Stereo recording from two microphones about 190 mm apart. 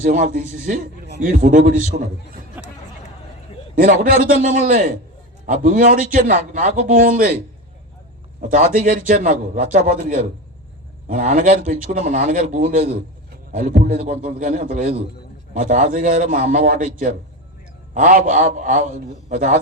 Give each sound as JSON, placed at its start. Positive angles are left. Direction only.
{"t": 0.0, "sound": "a man's voice", "side_deg": -40}
{"t": 2.6, "sound": "music", "side_deg": -10}
{"t": 3.8, "sound": "a man's voice", "side_deg": -50}
{"t": 8.4, "sound": "a man's voice", "side_deg": -45}
{"t": 17.9, "sound": "a man's voice", "side_deg": -45}